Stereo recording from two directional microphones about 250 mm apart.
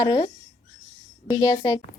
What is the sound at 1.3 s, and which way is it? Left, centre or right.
Speech, centre.